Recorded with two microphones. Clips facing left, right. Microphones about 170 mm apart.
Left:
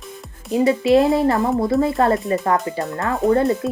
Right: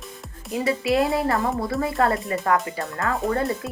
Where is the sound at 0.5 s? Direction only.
20° left (ahead or behind).